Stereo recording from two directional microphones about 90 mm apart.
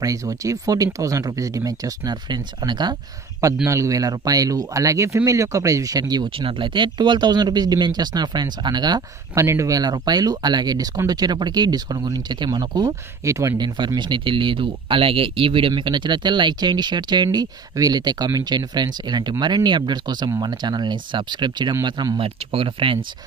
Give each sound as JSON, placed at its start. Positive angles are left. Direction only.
{"t": 0.0, "sound": "speech", "side_deg": -40}
{"t": 3.6, "sound": "speech", "side_deg": -35}
{"t": 6.3, "sound": "speech", "side_deg": -70}
{"t": 9.3, "sound": "speech", "side_deg": -35}
{"t": 13.2, "sound": "speech", "side_deg": -35}
{"t": 13.6, "sound": "speech", "side_deg": -55}
{"t": 15.7, "sound": "speech", "side_deg": -60}